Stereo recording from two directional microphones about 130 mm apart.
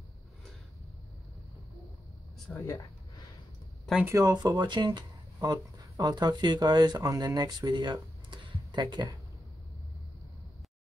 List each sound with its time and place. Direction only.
2.5 s speech: 20° left (ahead or behind)
4.0 s speech: 25° right (ahead or behind)